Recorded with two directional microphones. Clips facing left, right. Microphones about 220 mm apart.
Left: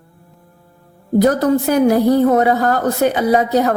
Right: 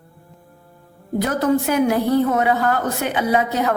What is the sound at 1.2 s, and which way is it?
A woman's voice, 40° left (ahead or behind).